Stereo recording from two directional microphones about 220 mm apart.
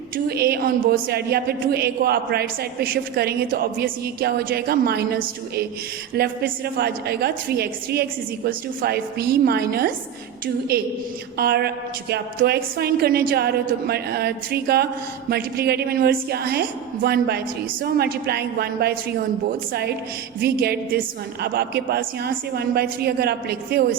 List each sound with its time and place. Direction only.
0.3 s speech: 45° right (ahead or behind)